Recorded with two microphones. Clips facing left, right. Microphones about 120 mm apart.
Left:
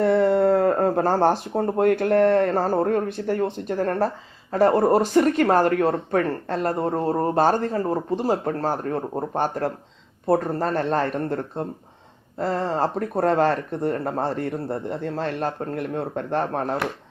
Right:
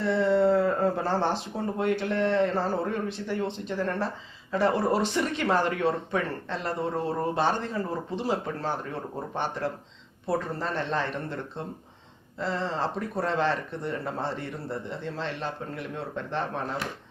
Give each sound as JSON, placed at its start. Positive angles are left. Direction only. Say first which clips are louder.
{"t": 0.0, "sound": "speech", "louder": "left 5 dB", "side_deg": 55}